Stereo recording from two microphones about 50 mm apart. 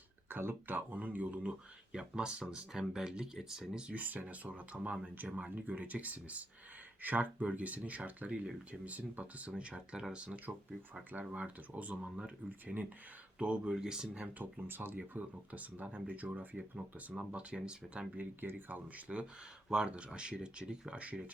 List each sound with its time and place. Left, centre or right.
0.3 s speech: right
1.9 s speech: centre
3.9 s speech: right
12.5 s speech: right
13.4 s speech: centre
14.3 s speech: right
16.2 s speech: right
17.1 s speech: right
18.2 s speech: right